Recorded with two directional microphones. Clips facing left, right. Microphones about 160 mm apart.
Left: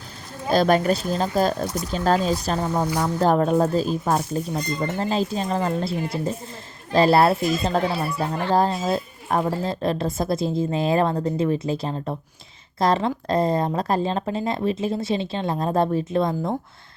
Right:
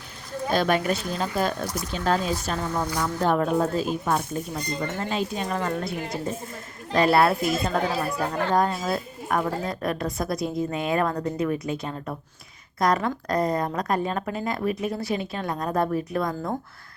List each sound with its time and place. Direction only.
0.5 s a woman's voice: 35° left (ahead or behind)